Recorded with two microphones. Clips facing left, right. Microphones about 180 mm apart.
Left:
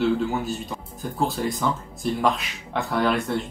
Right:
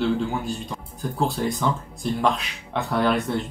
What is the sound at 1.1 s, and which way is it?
Speech, centre (ahead or behind).